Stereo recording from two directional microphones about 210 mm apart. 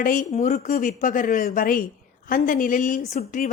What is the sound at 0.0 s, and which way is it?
Speech, 40° left (ahead or behind).